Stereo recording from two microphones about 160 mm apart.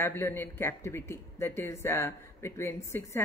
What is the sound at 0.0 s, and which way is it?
Speech, 15° left (ahead or behind).